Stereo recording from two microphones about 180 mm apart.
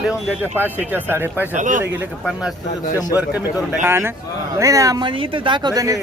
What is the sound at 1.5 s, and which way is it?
Speech, 45° right (ahead or behind).